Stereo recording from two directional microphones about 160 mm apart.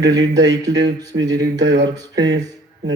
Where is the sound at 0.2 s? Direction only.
25° right (ahead or behind).